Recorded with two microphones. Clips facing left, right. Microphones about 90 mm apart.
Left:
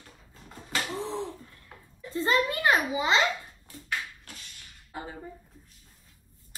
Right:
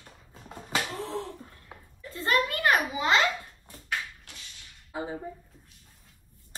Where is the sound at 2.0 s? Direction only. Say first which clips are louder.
Left 1 dB; 25° left (ahead or behind).